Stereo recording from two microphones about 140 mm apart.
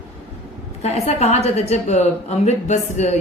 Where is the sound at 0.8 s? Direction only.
50° left (ahead or behind).